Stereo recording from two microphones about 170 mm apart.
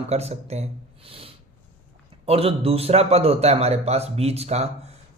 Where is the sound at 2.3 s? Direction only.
35° right (ahead or behind).